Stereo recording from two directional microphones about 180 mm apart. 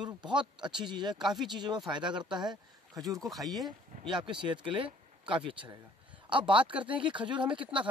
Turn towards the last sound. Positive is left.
turn(degrees=-25)  # may be behind; listen again after turning